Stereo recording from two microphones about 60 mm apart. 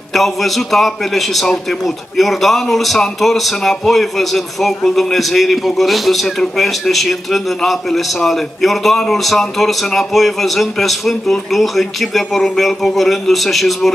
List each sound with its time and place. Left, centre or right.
0.1 s a man's voice: centre